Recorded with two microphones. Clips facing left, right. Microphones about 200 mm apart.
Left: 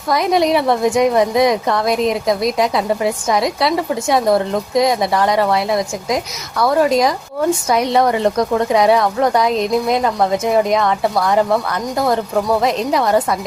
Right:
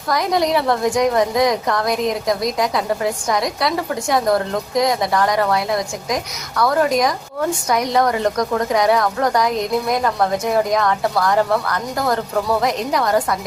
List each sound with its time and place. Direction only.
0.1 s a woman's voice: 20° left (ahead or behind)